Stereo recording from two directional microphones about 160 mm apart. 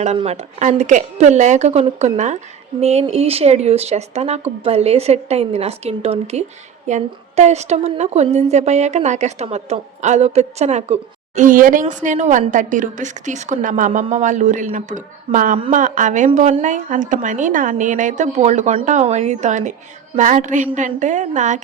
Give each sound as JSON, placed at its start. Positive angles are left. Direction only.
{"t": 0.0, "sound": "a woman's voice", "side_deg": -40}